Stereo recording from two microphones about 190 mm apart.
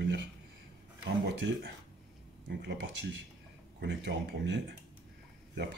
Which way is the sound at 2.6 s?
70° right (ahead or behind).